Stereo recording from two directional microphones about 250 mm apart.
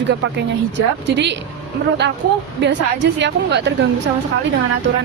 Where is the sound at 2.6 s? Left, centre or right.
Right.